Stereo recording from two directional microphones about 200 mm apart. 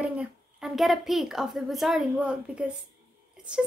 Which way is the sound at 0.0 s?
5° right (ahead or behind).